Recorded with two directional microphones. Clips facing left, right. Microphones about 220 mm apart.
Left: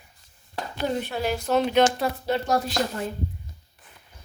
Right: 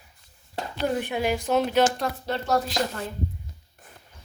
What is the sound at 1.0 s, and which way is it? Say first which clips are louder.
Speech: right 1 dB; 15° right (ahead or behind).